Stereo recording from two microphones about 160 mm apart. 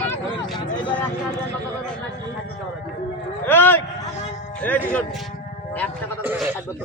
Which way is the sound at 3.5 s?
15° left (ahead or behind).